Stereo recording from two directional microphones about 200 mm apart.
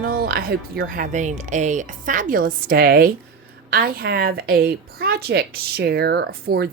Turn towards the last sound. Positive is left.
turn(degrees=-50)  # may be behind; listen again after turning